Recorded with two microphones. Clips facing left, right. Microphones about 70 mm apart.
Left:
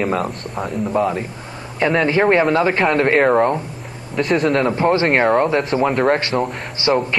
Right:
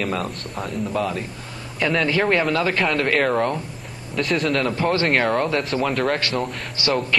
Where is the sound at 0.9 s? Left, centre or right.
Left.